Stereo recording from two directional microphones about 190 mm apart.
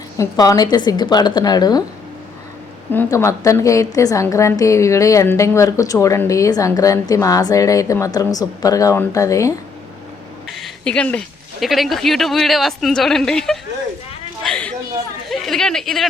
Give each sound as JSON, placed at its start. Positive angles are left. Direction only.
{"t": 0.2, "sound": "a woman's voice", "side_deg": 20}
{"t": 2.9, "sound": "a woman's voice", "side_deg": 10}
{"t": 10.5, "sound": "a sound", "side_deg": 5}
{"t": 11.6, "sound": "a woman's voice", "side_deg": 0}
{"t": 14.4, "sound": "a sound", "side_deg": 5}
{"t": 15.3, "sound": "speech", "side_deg": 0}